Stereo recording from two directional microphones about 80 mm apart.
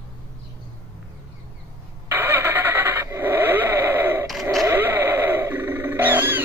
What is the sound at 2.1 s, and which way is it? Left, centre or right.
Vehicle, right.